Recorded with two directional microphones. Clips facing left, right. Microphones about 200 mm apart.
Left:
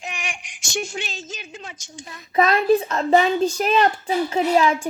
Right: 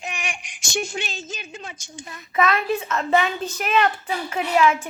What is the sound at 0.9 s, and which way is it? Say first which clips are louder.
A woman's voice: right 1 dB; 55° right (ahead or behind).